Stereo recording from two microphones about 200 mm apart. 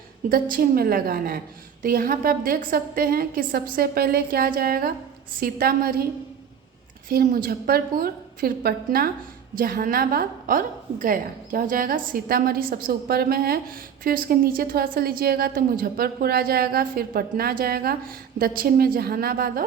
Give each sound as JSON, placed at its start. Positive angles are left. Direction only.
{"t": 0.3, "sound": "a woman's voice", "side_deg": -45}
{"t": 7.1, "sound": "a woman's voice", "side_deg": -45}